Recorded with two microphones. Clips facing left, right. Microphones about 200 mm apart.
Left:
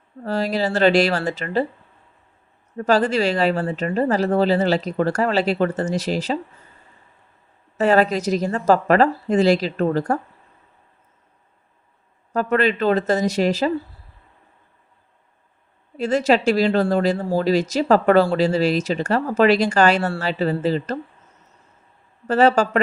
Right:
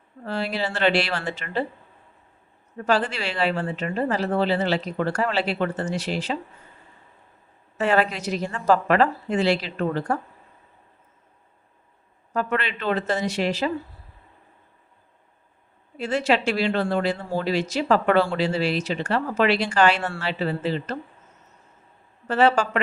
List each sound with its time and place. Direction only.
0.3 s speech: 40° left (ahead or behind)
2.7 s speech: 40° left (ahead or behind)
7.8 s speech: 40° left (ahead or behind)
12.3 s speech: 40° left (ahead or behind)
16.0 s speech: 40° left (ahead or behind)
22.3 s speech: 40° left (ahead or behind)